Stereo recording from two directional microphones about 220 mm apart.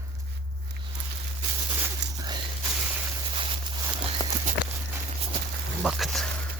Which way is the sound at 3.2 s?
25° right (ahead or behind).